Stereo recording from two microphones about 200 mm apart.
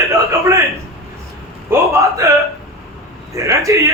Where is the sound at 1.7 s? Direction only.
15° right (ahead or behind).